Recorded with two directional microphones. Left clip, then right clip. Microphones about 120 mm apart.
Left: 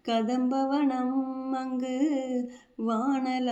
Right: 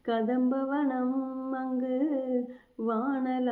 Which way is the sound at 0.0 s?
20° left (ahead or behind).